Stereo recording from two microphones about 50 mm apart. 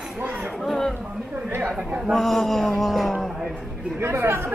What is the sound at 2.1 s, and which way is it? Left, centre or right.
A man's voice, centre.